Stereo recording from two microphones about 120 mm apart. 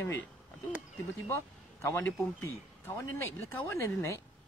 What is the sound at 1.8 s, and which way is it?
Speech, 25° left (ahead or behind).